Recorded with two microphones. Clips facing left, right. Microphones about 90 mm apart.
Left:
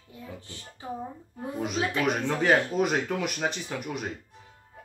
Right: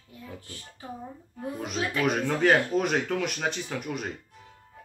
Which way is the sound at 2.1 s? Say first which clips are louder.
Right 2 dB; centre (ahead or behind).